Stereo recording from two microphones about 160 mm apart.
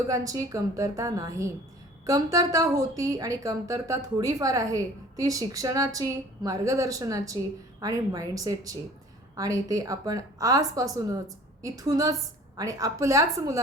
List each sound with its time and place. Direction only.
0.1 s a woman's voice: 20° right (ahead or behind)